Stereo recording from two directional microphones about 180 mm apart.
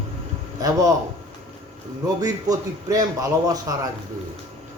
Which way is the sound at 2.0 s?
20° right (ahead or behind).